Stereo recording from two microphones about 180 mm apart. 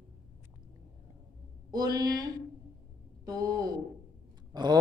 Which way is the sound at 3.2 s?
20° right (ahead or behind).